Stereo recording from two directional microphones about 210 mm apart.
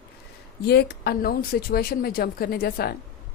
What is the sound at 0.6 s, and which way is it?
Speech, 50° left (ahead or behind).